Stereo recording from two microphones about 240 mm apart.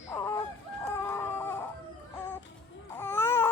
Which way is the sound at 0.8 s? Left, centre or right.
Centre.